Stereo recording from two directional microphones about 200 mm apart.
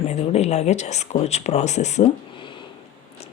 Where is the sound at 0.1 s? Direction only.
35° left (ahead or behind).